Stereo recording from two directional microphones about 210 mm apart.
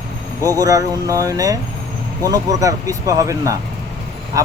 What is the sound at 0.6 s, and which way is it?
Speech, 15° right (ahead or behind).